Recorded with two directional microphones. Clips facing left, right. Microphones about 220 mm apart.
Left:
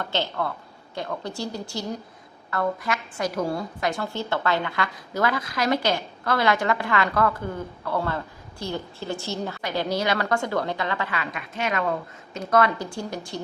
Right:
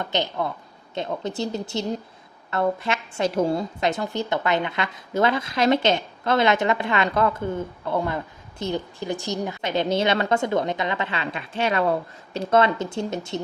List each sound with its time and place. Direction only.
0.0 s a woman's voice: 20° right (ahead or behind)